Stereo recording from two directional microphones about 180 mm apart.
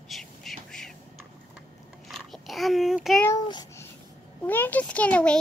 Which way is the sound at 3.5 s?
25° left (ahead or behind).